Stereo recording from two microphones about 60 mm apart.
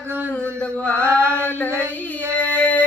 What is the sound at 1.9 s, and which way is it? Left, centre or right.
Child singing, left.